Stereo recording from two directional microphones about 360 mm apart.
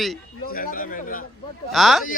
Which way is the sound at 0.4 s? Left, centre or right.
Left.